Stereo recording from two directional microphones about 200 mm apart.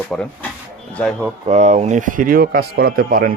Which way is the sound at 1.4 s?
35° right (ahead or behind).